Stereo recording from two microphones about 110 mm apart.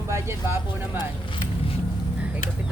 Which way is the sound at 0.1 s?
20° right (ahead or behind).